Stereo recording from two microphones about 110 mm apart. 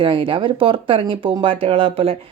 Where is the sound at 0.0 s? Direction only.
50° right (ahead or behind).